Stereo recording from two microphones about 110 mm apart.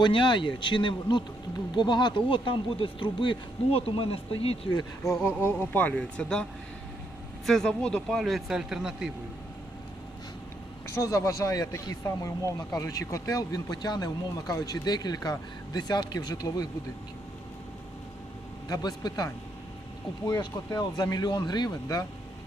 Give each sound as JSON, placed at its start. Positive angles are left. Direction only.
{"t": 0.0, "sound": "speech", "side_deg": 45}
{"t": 4.7, "sound": "speech", "side_deg": 35}
{"t": 5.2, "sound": "speech", "side_deg": 20}
{"t": 7.4, "sound": "speech", "side_deg": 5}
{"t": 10.8, "sound": "speech", "side_deg": 30}
{"t": 18.7, "sound": "speech", "side_deg": 35}
{"t": 20.4, "sound": "speech", "side_deg": 40}